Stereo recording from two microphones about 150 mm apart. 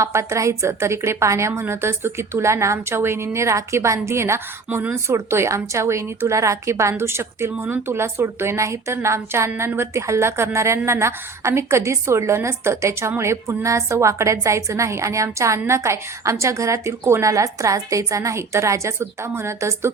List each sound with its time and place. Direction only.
0.0 s a woman's voice: 20° right (ahead or behind)